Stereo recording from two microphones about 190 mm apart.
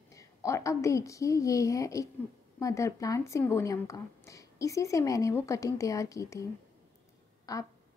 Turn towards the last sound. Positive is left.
turn(degrees=20)  # may be behind; listen again after turning